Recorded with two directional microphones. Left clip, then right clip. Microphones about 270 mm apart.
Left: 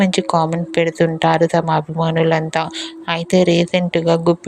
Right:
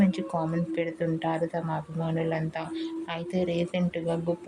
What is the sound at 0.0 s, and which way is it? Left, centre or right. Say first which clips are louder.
A woman's voice: left 13 dB; left.